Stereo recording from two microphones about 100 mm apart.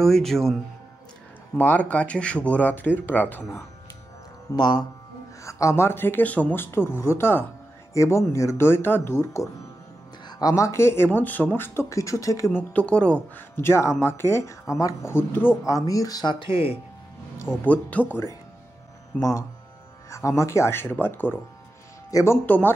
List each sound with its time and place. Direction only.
0.0 s speech: 5° left (ahead or behind)
1.6 s speech: 15° left (ahead or behind)
4.6 s speech: 45° left (ahead or behind)
5.4 s speech: 30° left (ahead or behind)
12.5 s speech: 10° left (ahead or behind)
13.6 s speech: 25° left (ahead or behind)
15.6 s speech: 35° left (ahead or behind)
16.3 s speech: 65° left (ahead or behind)
17.6 s speech: 15° left (ahead or behind)
19.1 s speech: 30° left (ahead or behind)